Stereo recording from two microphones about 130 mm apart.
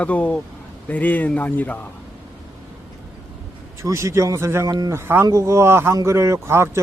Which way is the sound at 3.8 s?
20° right (ahead or behind).